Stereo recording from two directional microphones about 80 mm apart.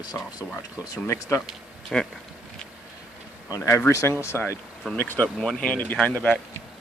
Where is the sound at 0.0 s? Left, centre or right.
Left.